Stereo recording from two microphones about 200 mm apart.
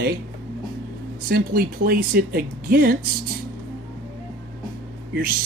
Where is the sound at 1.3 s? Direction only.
50° right (ahead or behind).